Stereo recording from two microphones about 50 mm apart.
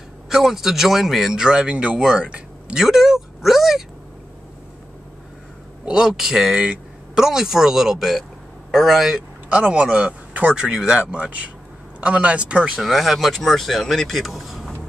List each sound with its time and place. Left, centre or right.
0.3 s speech: centre
2.8 s speech: centre
5.9 s speech: centre
6.5 s speech: right
7.2 s speech: centre
9.5 s speech: right
12.7 s speech: centre